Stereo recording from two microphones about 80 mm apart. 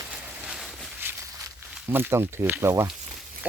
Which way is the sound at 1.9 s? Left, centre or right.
Right.